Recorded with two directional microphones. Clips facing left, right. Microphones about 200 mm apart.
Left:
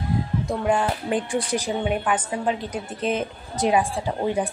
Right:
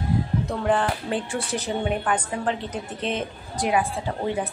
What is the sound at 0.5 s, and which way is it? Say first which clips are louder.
A woman's voice: left 2 dB; 10° left (ahead or behind).